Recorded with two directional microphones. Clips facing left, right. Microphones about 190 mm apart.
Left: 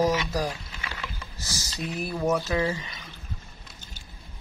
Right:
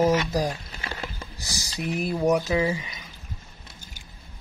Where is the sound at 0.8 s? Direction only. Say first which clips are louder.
Right 3 dB; 45° right (ahead or behind).